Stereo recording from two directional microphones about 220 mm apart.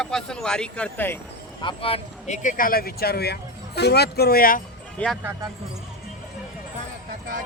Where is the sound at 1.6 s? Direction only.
25° left (ahead or behind); by 4.6 s 40° left (ahead or behind).